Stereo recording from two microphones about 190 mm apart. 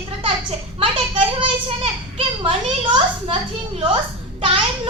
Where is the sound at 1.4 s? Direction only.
25° right (ahead or behind).